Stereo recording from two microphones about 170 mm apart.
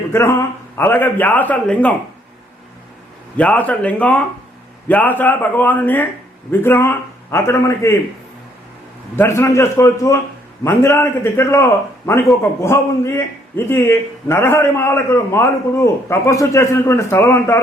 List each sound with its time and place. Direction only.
0.1 s a man's voice: 15° left (ahead or behind)
3.3 s a man's voice: 10° left (ahead or behind)
9.1 s a man's voice: 15° left (ahead or behind)